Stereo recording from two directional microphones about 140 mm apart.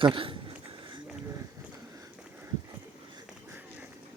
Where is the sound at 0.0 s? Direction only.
35° right (ahead or behind).